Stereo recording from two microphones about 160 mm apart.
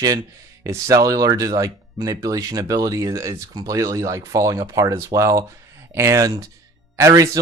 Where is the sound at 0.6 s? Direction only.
20° right (ahead or behind).